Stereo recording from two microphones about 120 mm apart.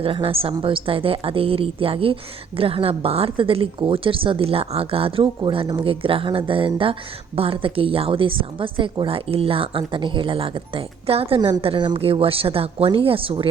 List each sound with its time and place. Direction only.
0.0 s a woman's voice: 50° right (ahead or behind)
11.3 s a woman's voice: 35° right (ahead or behind)